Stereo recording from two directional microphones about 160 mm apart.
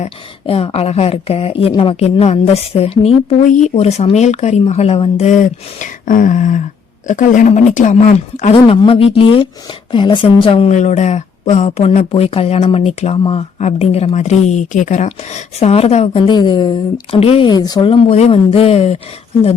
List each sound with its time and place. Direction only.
0.0 s a woman's voice: 40° left (ahead or behind)
8.5 s a woman's voice: 35° left (ahead or behind)
10.7 s speech: 45° left (ahead or behind)
16.2 s a woman's voice: 30° left (ahead or behind)